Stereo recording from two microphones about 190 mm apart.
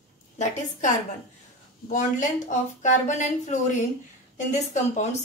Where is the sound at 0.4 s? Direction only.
40° left (ahead or behind).